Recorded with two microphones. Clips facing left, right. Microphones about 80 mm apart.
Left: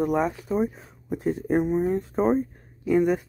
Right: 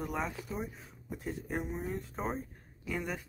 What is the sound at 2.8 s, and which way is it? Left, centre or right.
Speech, centre.